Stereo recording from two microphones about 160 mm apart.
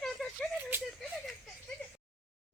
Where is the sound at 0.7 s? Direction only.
15° right (ahead or behind).